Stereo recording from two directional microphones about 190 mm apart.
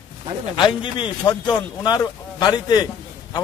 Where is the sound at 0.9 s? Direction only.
25° left (ahead or behind).